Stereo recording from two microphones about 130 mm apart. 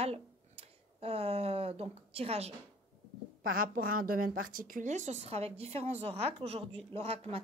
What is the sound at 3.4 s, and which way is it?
Speech, 90° right.